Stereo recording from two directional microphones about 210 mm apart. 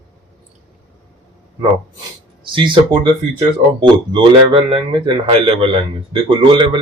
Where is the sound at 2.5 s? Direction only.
20° right (ahead or behind).